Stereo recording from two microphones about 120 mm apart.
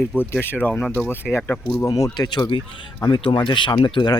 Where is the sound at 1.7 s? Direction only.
30° left (ahead or behind).